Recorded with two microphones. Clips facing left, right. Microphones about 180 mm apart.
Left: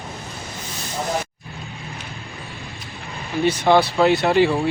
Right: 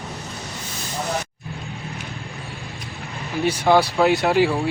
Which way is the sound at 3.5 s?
10° right (ahead or behind).